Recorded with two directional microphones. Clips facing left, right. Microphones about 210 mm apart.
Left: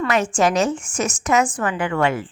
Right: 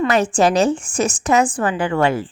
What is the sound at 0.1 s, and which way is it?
A woman's voice, 35° right (ahead or behind).